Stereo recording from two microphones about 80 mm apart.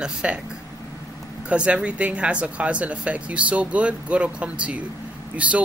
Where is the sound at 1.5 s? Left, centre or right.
Centre.